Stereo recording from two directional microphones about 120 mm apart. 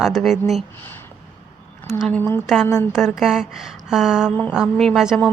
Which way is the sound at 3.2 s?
Centre (ahead or behind).